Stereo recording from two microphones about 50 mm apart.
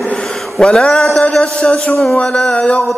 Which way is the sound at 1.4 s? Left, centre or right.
Left.